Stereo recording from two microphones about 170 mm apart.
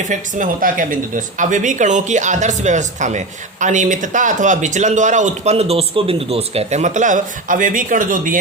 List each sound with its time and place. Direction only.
0.1 s speech: 50° right (ahead or behind)